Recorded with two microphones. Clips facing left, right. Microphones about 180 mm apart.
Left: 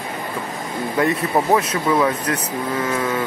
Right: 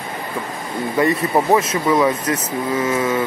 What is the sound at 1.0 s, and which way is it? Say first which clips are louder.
Speech: right 2 dB; centre (ahead or behind).